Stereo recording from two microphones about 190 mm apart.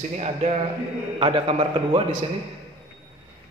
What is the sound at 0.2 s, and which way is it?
A man's voice, 35° right (ahead or behind).